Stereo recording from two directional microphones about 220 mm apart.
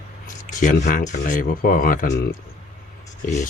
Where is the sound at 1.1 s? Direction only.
35° left (ahead or behind).